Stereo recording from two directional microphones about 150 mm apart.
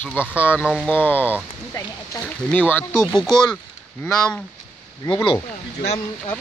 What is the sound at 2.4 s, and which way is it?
Speech, 10° left (ahead or behind).